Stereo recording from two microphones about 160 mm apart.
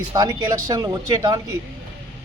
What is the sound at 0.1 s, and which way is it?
Speech, 25° right (ahead or behind).